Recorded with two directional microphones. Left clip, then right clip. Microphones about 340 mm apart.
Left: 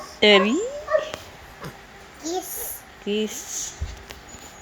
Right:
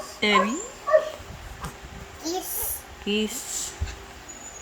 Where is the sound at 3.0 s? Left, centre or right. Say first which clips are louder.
Left 1 dB; centre.